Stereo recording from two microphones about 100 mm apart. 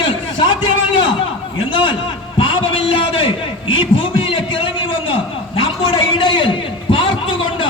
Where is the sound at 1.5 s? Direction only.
55° left (ahead or behind).